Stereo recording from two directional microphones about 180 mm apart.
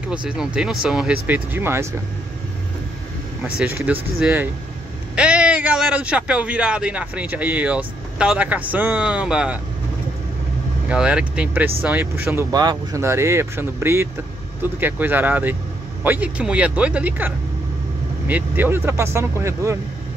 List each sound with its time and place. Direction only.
0.0 s speech: 5° right (ahead or behind)
3.5 s a man's voice: 10° right (ahead or behind)
10.9 s speech: 5° right (ahead or behind)